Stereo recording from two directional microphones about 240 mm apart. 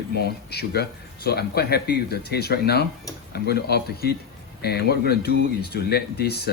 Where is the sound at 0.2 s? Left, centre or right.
Left.